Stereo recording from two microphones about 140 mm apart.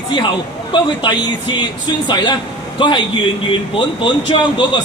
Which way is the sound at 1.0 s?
35° left (ahead or behind).